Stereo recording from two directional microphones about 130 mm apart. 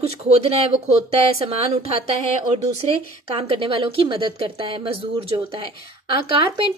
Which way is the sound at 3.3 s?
45° right (ahead or behind).